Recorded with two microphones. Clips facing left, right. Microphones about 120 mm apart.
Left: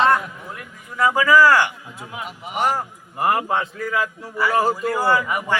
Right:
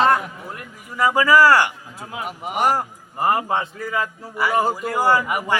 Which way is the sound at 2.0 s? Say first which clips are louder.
Right 2 dB; 35° right (ahead or behind).